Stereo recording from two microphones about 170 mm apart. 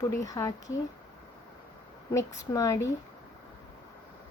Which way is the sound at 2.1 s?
20° left (ahead or behind).